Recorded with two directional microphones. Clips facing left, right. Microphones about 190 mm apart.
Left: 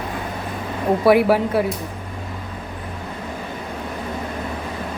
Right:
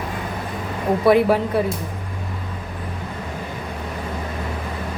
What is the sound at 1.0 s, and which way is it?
Speech, 5° left (ahead or behind).